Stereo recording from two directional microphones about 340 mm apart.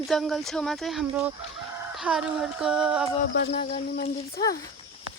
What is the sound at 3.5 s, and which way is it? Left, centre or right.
Speech, centre.